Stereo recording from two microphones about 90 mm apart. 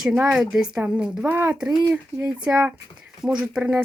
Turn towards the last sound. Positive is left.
turn(degrees=-15)  # may be behind; listen again after turning